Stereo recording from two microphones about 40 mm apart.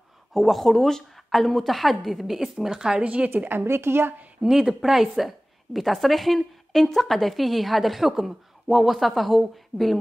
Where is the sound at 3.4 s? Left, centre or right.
Right.